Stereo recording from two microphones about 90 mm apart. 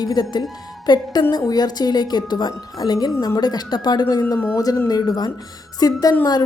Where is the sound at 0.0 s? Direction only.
50° left (ahead or behind).